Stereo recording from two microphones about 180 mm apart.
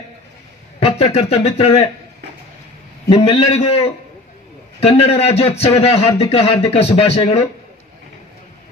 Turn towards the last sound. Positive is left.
turn(degrees=35)  # may be behind; listen again after turning